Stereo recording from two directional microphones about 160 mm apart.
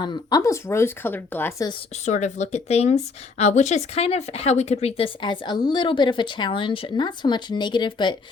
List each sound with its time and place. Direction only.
0.0 s speech: 25° left (ahead or behind)
2.0 s speech: 45° left (ahead or behind); by 8.1 s 30° left (ahead or behind)